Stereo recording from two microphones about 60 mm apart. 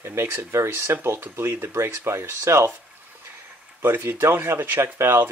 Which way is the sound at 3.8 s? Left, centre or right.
Right.